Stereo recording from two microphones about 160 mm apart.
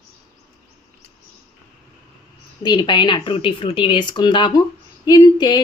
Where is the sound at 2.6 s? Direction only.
25° left (ahead or behind).